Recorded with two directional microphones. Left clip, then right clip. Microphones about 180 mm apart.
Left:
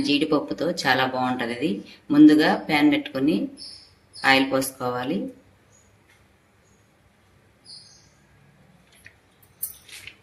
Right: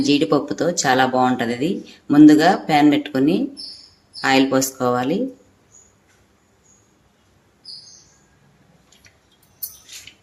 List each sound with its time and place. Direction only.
0.0 s speech: 55° right (ahead or behind)